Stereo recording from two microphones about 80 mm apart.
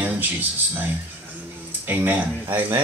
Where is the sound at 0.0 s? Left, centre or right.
Right.